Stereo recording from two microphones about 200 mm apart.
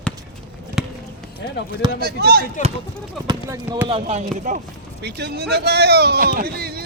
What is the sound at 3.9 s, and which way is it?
Speech, 35° right (ahead or behind).